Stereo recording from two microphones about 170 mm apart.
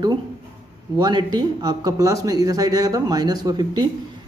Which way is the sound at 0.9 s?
25° right (ahead or behind).